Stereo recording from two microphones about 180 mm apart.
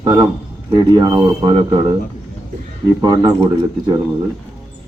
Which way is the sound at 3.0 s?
20° right (ahead or behind).